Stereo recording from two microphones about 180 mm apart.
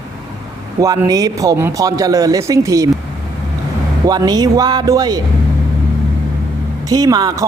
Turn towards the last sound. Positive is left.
turn(degrees=-20)  # may be behind; listen again after turning